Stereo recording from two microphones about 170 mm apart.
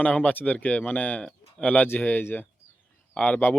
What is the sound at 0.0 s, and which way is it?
Speech, 10° left (ahead or behind).